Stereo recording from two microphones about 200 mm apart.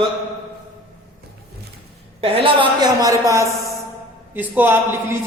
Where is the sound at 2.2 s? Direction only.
30° right (ahead or behind); by 5.0 s 10° right (ahead or behind).